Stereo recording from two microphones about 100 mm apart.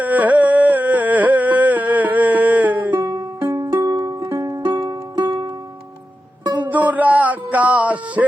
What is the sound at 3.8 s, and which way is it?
Music, 35° right (ahead or behind).